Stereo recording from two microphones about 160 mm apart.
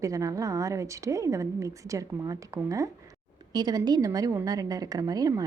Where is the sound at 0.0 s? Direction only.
20° right (ahead or behind).